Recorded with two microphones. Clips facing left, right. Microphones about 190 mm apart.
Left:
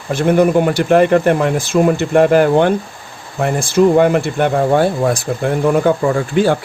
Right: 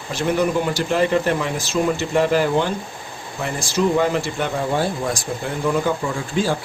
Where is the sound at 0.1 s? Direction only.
55° left (ahead or behind).